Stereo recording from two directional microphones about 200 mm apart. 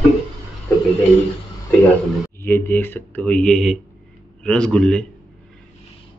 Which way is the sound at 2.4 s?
10° left (ahead or behind).